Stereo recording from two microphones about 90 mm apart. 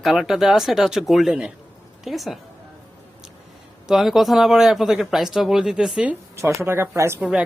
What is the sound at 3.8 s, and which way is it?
Speech, centre (ahead or behind).